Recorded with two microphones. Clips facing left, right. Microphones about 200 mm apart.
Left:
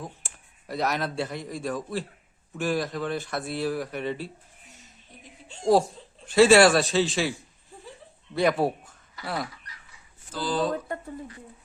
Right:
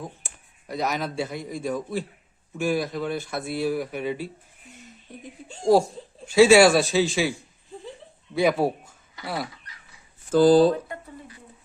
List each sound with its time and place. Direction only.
0.7 s speech: centre (ahead or behind)
5.7 s speech: centre (ahead or behind)
8.4 s speech: centre (ahead or behind)
10.3 s mantra: 45° right (ahead or behind)